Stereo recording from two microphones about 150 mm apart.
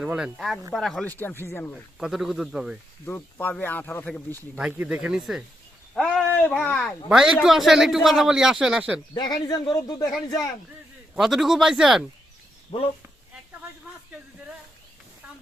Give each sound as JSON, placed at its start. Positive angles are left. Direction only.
{"t": 0.0, "sound": "speech", "side_deg": -5}
{"t": 1.1, "sound": "speech", "side_deg": 15}
{"t": 1.7, "sound": "speech", "side_deg": 0}
{"t": 3.1, "sound": "speech", "side_deg": 15}
{"t": 4.5, "sound": "speech", "side_deg": -10}
{"t": 9.1, "sound": "a man's voice", "side_deg": 25}
{"t": 11.1, "sound": "speech", "side_deg": 0}
{"t": 12.7, "sound": "speech", "side_deg": 35}